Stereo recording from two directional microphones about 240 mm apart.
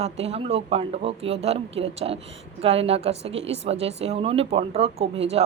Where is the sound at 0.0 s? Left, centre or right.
Right.